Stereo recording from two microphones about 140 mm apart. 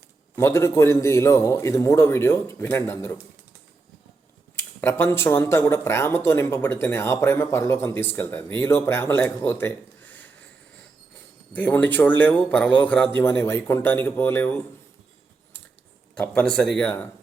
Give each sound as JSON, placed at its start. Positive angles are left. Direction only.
{"t": 0.3, "sound": "a man's voice", "side_deg": 20}
{"t": 4.5, "sound": "a man's voice", "side_deg": 15}
{"t": 11.5, "sound": "speech", "side_deg": 10}
{"t": 16.1, "sound": "speech", "side_deg": 10}